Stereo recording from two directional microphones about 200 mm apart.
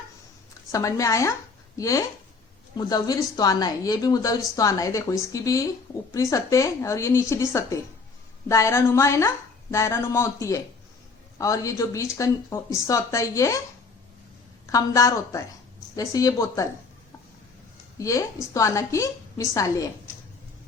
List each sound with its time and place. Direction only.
0.7 s a woman's voice: 15° left (ahead or behind)
14.7 s a woman's voice: 15° left (ahead or behind)
17.9 s a woman's voice: 15° left (ahead or behind)